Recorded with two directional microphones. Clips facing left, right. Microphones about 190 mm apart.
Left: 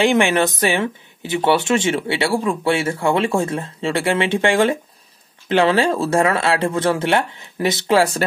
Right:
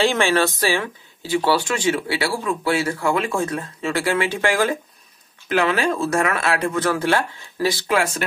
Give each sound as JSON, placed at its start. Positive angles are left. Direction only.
{"t": 0.0, "sound": "speech", "side_deg": 15}